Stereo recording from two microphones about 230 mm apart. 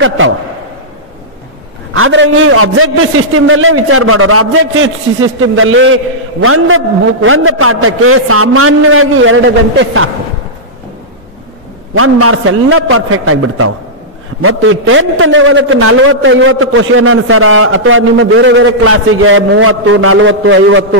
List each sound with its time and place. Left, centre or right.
0.2 s a man's voice: right
2.0 s a man's voice: right
11.9 s a man's voice: right
14.4 s a man's voice: right